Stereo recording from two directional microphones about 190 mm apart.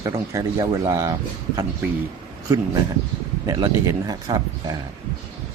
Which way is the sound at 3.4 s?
15° right (ahead or behind).